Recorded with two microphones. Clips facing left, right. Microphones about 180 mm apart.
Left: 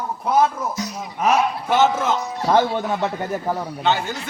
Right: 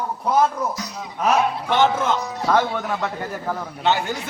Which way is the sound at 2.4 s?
25° left (ahead or behind).